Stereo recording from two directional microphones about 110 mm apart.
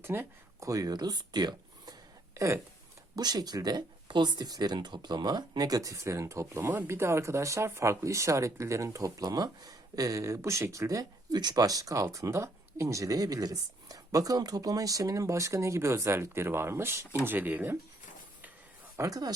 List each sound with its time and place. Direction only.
0.0 s speech: 20° right (ahead or behind)
18.9 s speech: 30° right (ahead or behind)